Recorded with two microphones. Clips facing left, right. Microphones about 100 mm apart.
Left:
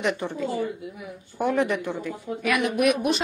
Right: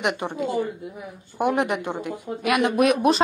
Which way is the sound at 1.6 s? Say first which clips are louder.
Even; 65° right (ahead or behind).